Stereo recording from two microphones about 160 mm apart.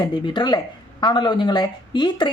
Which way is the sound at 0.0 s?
30° left (ahead or behind).